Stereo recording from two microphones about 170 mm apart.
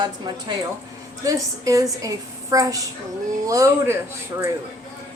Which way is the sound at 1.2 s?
20° right (ahead or behind).